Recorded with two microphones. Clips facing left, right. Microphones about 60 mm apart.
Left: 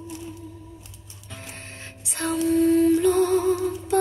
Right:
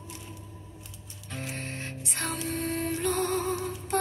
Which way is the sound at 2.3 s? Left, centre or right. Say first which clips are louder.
Left 16 dB; right.